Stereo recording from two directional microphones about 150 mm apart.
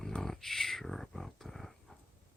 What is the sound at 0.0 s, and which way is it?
Speech, 5° left (ahead or behind).